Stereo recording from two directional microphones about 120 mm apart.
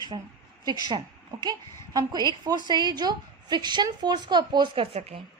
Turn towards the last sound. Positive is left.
turn(degrees=-55)  # may be behind; listen again after turning